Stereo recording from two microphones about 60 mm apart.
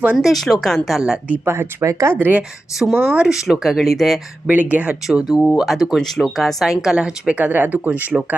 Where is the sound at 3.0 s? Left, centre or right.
Centre.